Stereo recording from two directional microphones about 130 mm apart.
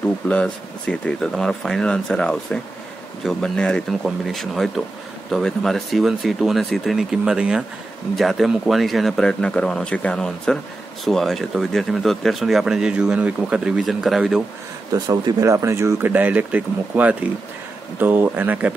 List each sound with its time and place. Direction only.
0.3 s speech: 5° left (ahead or behind)
14.9 s speech: 30° right (ahead or behind); by 18.7 s 15° right (ahead or behind)